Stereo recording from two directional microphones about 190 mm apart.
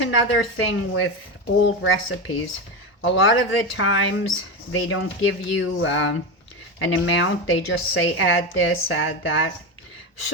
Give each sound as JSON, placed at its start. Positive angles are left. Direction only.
{"t": 0.0, "sound": "a woman's voice", "side_deg": 85}